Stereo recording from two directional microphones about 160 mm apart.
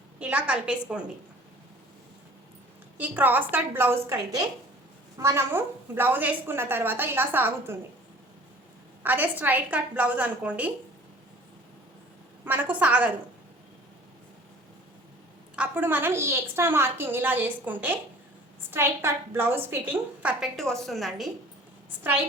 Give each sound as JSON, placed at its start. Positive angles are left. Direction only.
{"t": 0.2, "sound": "a woman's voice", "side_deg": -10}
{"t": 3.0, "sound": "a woman's voice", "side_deg": -10}
{"t": 9.0, "sound": "a woman's voice", "side_deg": -10}
{"t": 12.5, "sound": "a woman's voice", "side_deg": -10}
{"t": 15.5, "sound": "a woman's voice", "side_deg": -10}